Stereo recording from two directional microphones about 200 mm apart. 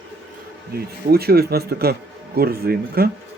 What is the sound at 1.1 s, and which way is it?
Speech, 50° right (ahead or behind).